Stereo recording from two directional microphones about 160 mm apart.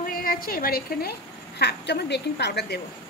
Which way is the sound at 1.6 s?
90° left.